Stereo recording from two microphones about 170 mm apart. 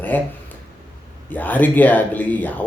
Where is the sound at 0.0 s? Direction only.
10° left (ahead or behind).